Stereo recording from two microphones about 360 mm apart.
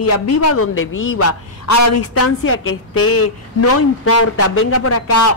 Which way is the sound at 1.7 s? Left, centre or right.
Left.